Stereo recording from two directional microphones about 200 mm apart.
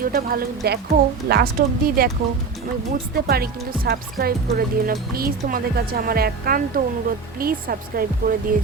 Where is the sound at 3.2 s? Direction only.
50° right (ahead or behind).